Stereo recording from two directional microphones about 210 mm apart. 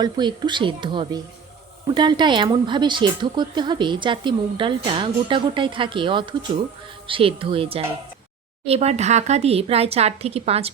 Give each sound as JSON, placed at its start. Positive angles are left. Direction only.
{"t": 0.0, "sound": "speech", "side_deg": -20}